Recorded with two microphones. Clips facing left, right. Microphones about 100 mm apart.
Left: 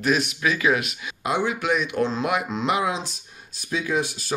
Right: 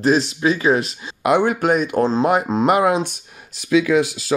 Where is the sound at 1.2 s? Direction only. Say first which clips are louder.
Right 8 dB; 60° right (ahead or behind).